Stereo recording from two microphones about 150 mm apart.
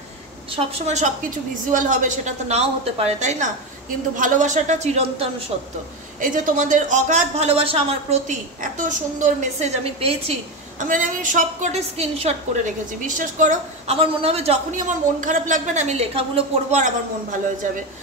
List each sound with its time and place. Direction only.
0.5 s a woman's voice: 50° right (ahead or behind)
1.7 s a woman's voice: 60° right (ahead or behind); by 5.3 s 45° right (ahead or behind)
6.2 s a woman's voice: 60° right (ahead or behind); by 10.3 s 40° right (ahead or behind)
10.8 s a woman's voice: 65° right (ahead or behind); by 16.8 s 40° right (ahead or behind)
16.8 s a woman's voice: 60° right (ahead or behind)